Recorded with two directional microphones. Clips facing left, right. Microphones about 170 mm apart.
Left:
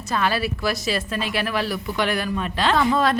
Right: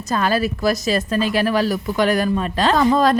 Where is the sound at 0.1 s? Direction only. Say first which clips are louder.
Right 4 dB; 40° right (ahead or behind).